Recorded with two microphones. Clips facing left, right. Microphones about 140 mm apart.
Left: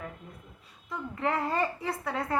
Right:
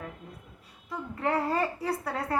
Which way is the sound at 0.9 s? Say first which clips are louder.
Right 1 dB; 35° right (ahead or behind).